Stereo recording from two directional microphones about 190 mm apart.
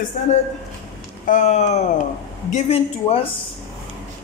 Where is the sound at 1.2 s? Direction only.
40° left (ahead or behind).